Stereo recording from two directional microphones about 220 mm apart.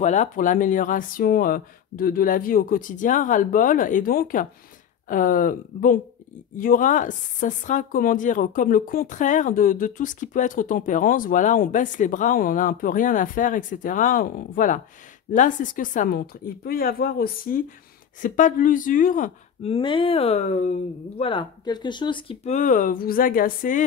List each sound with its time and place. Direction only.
0.0 s speech: 35° left (ahead or behind)